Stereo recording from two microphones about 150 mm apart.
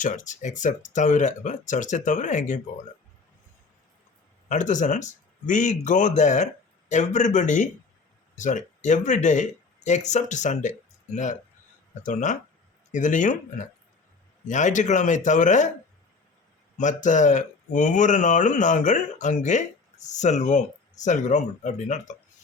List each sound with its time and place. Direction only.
0.0 s speech: 55° left (ahead or behind)
4.4 s speech: 55° left (ahead or behind)
16.7 s speech: 55° left (ahead or behind)